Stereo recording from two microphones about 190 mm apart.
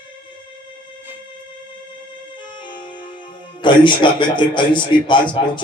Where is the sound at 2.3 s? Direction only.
25° left (ahead or behind).